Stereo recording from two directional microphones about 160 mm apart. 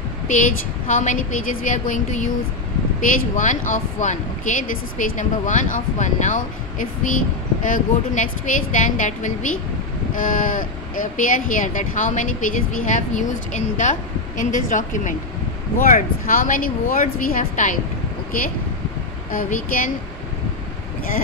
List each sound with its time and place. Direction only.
0.3 s speech: 55° left (ahead or behind)
19.3 s speech: 55° left (ahead or behind)